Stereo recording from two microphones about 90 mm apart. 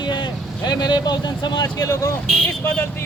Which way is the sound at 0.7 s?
55° left (ahead or behind).